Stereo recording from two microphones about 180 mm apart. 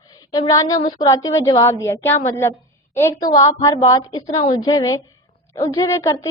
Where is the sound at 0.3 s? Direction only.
20° left (ahead or behind).